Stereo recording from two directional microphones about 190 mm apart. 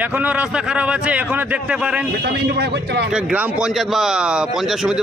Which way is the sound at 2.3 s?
60° right (ahead or behind).